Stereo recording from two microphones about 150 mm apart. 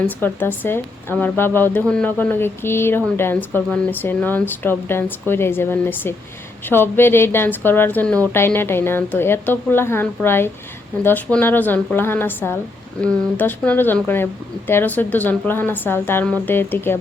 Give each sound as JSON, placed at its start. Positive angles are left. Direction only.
{"t": 0.2, "sound": "speech", "side_deg": 15}